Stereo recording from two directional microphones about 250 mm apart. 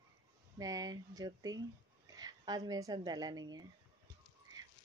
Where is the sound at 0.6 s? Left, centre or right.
Centre.